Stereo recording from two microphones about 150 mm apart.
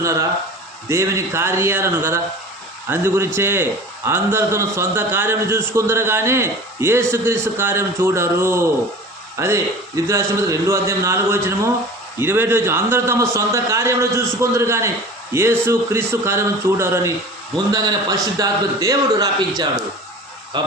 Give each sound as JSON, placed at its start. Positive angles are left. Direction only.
{"t": 0.0, "sound": "a man's voice", "side_deg": -20}
{"t": 18.3, "sound": "a man's voice", "side_deg": -25}